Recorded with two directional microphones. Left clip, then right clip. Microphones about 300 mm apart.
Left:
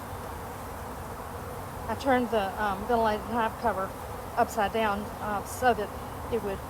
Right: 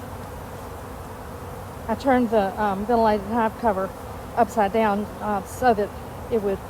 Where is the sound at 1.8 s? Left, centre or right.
Right.